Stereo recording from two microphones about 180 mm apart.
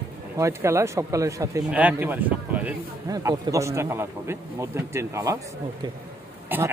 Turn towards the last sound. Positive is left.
turn(degrees=-10)  # may be behind; listen again after turning